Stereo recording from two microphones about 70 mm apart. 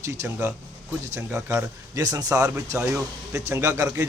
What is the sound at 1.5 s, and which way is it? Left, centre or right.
A man's voice, right.